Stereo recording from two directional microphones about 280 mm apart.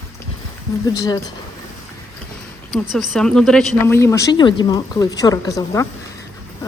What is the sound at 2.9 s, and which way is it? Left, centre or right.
A woman's voice, centre.